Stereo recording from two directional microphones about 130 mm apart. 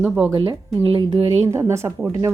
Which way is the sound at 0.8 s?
50° right (ahead or behind).